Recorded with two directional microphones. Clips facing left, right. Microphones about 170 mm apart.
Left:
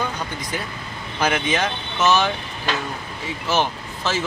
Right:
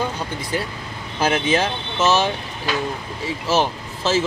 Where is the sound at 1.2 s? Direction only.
30° right (ahead or behind).